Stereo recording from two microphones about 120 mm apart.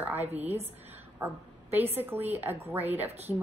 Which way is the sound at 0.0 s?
15° right (ahead or behind).